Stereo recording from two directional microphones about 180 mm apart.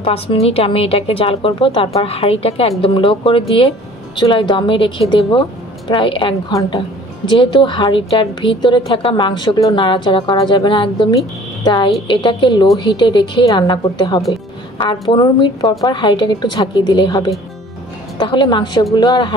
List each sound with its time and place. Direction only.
0.0 s a woman's voice: 35° left (ahead or behind)